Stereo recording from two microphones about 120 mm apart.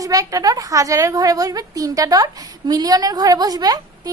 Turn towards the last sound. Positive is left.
turn(degrees=-30)  # may be behind; listen again after turning